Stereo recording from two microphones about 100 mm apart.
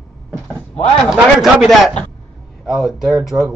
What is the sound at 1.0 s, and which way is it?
Speech, 5° right (ahead or behind).